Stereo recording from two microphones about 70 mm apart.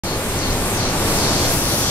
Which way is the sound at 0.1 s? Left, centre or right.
Left.